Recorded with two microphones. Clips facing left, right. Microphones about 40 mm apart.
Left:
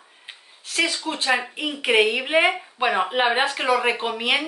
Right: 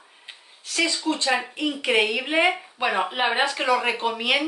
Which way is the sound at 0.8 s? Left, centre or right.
Left.